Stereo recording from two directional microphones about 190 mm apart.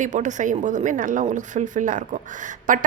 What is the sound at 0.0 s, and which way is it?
A woman's voice, 40° right (ahead or behind).